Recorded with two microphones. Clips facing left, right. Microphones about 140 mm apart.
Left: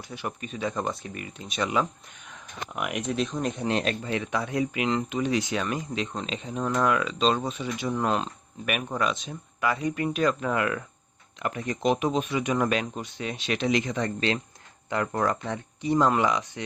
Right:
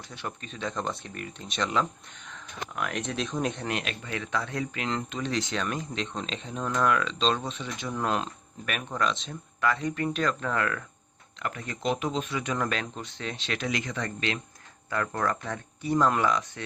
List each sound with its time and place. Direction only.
0.1 s speech: 5° left (ahead or behind)
2.7 s speech: 15° left (ahead or behind)
3.0 s speech: centre (ahead or behind)
3.7 s speech: 35° left (ahead or behind); by 8.3 s centre (ahead or behind)
8.6 s speech: 10° left (ahead or behind)
9.8 s speech: 15° left (ahead or behind)